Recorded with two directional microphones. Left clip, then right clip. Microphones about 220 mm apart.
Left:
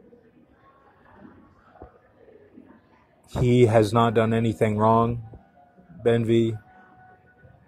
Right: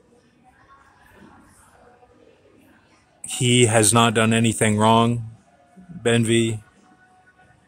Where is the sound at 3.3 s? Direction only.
15° right (ahead or behind).